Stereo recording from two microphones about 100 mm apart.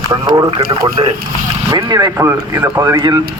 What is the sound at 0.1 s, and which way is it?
Speech, 45° right (ahead or behind).